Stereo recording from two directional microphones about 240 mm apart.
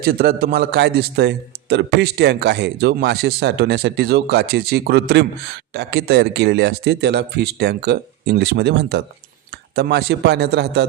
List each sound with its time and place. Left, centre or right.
0.0 s a man's voice: right